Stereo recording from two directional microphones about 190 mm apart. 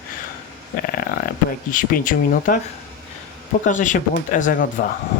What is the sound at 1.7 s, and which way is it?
Speech, 45° left (ahead or behind).